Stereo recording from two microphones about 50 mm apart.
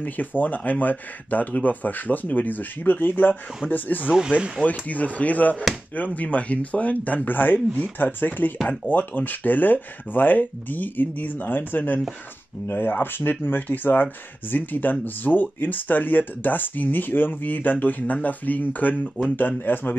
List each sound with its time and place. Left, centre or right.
0.0 s speech: left